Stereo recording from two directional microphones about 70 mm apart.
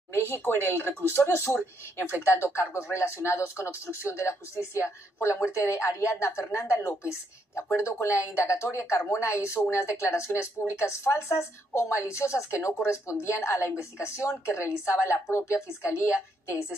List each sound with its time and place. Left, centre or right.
0.3 s a woman's voice: left